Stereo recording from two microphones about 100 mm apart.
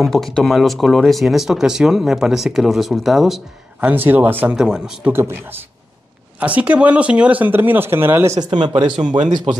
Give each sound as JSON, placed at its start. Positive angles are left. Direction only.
{"t": 0.0, "sound": "speech", "side_deg": 5}
{"t": 3.9, "sound": "speech", "side_deg": -20}
{"t": 4.6, "sound": "speech", "side_deg": -5}
{"t": 5.1, "sound": "speech", "side_deg": -20}
{"t": 8.4, "sound": "speech", "side_deg": -50}